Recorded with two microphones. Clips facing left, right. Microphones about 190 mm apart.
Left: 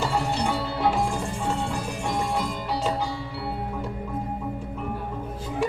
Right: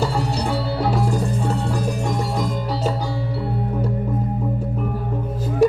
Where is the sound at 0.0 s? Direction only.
40° right (ahead or behind).